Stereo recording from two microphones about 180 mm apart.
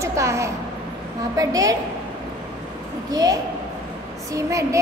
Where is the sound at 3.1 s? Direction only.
20° right (ahead or behind).